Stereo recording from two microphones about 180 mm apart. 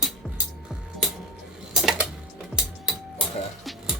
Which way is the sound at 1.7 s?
Centre (ahead or behind).